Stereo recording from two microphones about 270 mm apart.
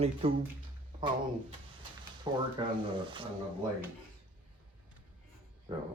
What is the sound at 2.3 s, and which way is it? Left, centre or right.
Speech, centre.